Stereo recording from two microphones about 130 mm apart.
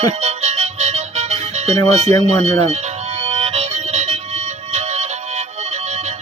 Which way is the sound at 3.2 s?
50° right (ahead or behind).